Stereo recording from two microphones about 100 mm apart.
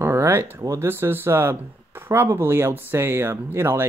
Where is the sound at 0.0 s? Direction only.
25° right (ahead or behind).